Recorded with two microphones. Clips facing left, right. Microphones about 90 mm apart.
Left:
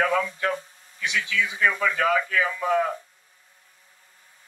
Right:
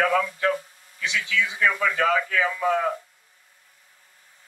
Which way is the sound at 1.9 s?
35° right (ahead or behind).